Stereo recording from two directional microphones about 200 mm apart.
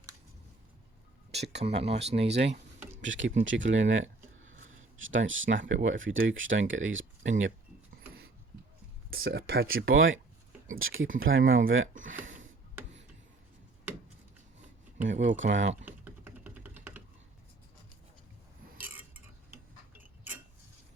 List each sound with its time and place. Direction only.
1.3 s speech: 30° right (ahead or behind)
2.2 s speech: 60° right (ahead or behind)
9.0 s speech: 50° right (ahead or behind)
9.9 s speech: 75° right (ahead or behind)
10.8 s speech: 85° right
15.3 s speech: 70° right (ahead or behind)
15.9 s typing: 10° right (ahead or behind)